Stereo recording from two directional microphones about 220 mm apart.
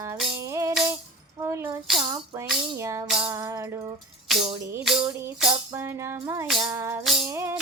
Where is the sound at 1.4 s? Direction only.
10° right (ahead or behind).